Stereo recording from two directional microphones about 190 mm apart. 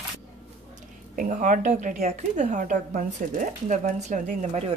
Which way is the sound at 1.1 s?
45° right (ahead or behind).